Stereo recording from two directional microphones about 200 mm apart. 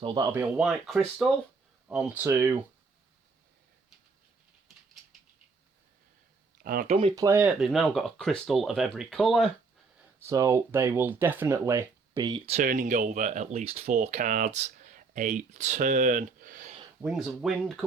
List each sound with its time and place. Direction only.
0.0 s speech: 25° right (ahead or behind)
0.3 s speech: 10° right (ahead or behind)
6.6 s speech: 45° right (ahead or behind)
7.2 s speech: 10° right (ahead or behind)
10.2 s speech: 15° right (ahead or behind)
12.5 s speech: 40° right (ahead or behind)
17.0 s speech: centre (ahead or behind)